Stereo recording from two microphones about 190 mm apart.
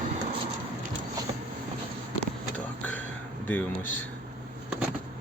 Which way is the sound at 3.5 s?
5° left (ahead or behind).